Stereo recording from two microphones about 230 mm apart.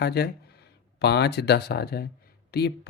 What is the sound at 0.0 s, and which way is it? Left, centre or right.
A man's voice, left.